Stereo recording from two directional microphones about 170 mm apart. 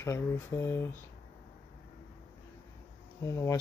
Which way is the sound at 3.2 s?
15° left (ahead or behind).